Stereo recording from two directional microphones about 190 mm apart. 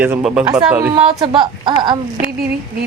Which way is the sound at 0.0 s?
5° right (ahead or behind).